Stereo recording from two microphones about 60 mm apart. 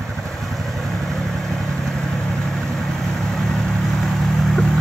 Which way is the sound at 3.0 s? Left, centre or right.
Centre.